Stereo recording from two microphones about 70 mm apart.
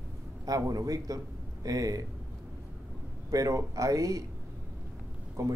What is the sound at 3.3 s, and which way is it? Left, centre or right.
Speech, right.